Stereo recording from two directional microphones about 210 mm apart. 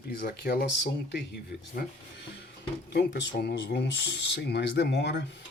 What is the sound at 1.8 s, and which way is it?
Speech, 45° left (ahead or behind).